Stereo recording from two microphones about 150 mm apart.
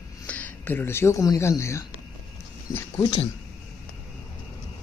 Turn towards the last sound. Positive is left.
turn(degrees=20)  # may be behind; listen again after turning